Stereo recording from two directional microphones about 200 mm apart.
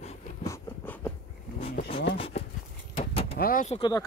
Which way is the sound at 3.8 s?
20° left (ahead or behind).